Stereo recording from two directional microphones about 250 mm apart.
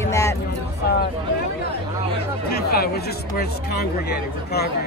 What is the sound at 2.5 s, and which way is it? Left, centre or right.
Speech, left.